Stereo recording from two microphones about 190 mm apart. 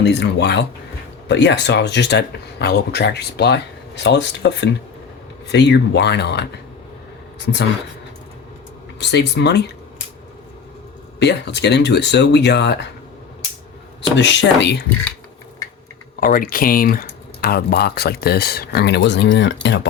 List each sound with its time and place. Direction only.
0.0 s speech: 65° left (ahead or behind)
9.0 s speech: 65° left (ahead or behind)
11.2 s speech: 65° left (ahead or behind)
14.2 s speech: 70° left (ahead or behind)
16.2 s speech: 50° left (ahead or behind); by 19.9 s 70° left (ahead or behind)